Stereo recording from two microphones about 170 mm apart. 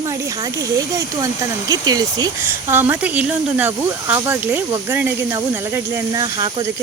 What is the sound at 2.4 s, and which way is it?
A woman's voice, 10° right (ahead or behind).